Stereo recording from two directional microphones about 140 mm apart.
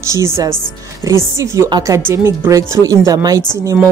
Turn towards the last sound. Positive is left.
turn(degrees=-25)  # may be behind; listen again after turning